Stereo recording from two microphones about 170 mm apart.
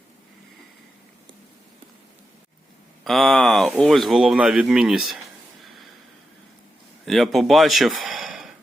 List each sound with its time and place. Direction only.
3.0 s speech: centre (ahead or behind)
5.6 s snort: centre (ahead or behind)
7.0 s speech: centre (ahead or behind)